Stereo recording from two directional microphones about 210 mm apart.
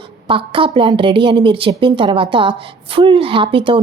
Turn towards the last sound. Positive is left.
turn(degrees=-25)  # may be behind; listen again after turning